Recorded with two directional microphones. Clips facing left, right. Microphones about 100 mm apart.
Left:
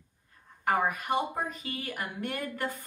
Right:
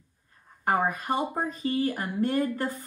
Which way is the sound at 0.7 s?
35° right (ahead or behind).